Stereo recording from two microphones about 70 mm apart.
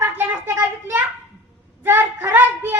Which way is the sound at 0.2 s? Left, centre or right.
Right.